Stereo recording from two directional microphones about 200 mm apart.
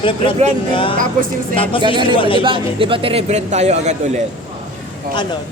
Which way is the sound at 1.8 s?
25° right (ahead or behind).